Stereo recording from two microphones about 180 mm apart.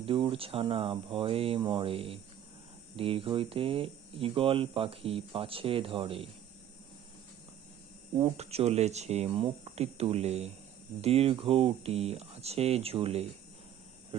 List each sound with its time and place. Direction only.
0.0 s speech: 30° right (ahead or behind)
8.2 s speech: 35° right (ahead or behind)